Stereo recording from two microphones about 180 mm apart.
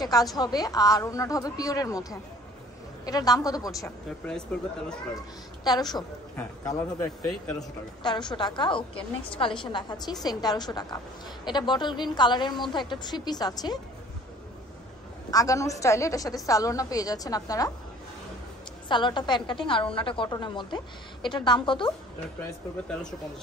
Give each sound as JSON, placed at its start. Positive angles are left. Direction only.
{"t": 0.0, "sound": "a woman's voice", "side_deg": 20}
{"t": 4.3, "sound": "speech", "side_deg": 5}
{"t": 5.1, "sound": "a woman's voice", "side_deg": 20}
{"t": 8.0, "sound": "a woman's voice", "side_deg": 25}
{"t": 15.3, "sound": "a woman's voice", "side_deg": 20}
{"t": 18.9, "sound": "a woman's voice", "side_deg": 25}